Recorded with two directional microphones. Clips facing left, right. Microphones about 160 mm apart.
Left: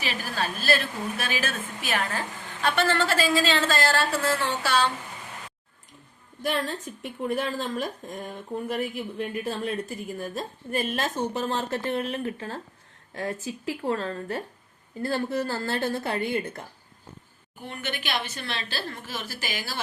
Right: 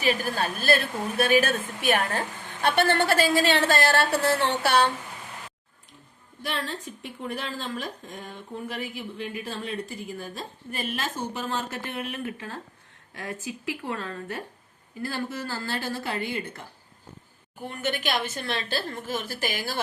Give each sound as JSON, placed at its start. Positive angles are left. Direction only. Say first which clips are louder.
{"t": 0.0, "sound": "a woman's voice", "louder": "right 4 dB", "side_deg": -50}
{"t": 6.4, "sound": "a woman's voice", "louder": "left 4 dB", "side_deg": 40}
{"t": 17.7, "sound": "a woman's voice", "louder": "right 3 dB", "side_deg": -45}